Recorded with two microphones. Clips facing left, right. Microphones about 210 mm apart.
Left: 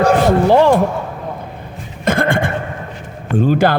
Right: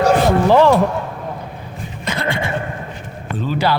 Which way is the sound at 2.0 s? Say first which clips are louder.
Left 7 dB; 50° left (ahead or behind).